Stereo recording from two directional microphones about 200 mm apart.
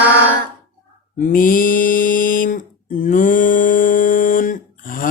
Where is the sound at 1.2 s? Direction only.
45° left (ahead or behind).